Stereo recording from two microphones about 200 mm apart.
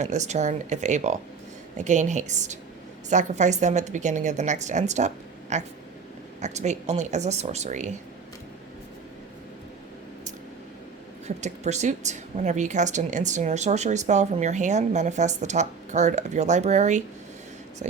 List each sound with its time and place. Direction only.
0.0 s a woman's voice: 35° right (ahead or behind)
11.3 s a woman's voice: 35° right (ahead or behind)